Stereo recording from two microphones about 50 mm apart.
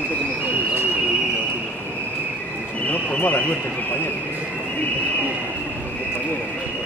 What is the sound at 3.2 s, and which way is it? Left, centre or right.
Horse, left.